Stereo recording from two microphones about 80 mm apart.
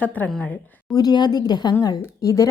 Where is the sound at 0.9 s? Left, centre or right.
Left.